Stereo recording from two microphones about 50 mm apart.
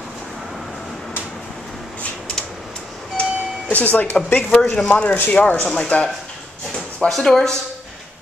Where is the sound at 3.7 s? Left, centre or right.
Left.